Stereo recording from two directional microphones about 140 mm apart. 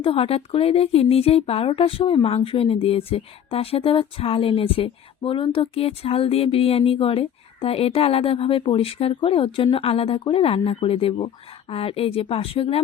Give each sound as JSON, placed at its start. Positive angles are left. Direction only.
{"t": 0.0, "sound": "speech", "side_deg": 40}